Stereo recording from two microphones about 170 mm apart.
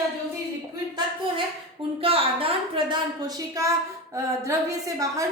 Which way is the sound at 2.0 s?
35° right (ahead or behind).